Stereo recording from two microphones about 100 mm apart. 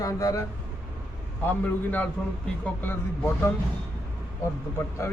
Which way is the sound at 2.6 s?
15° left (ahead or behind).